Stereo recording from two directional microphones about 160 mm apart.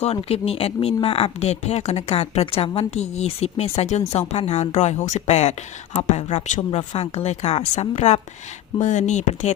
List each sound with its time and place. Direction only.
0.0 s speech: 40° left (ahead or behind)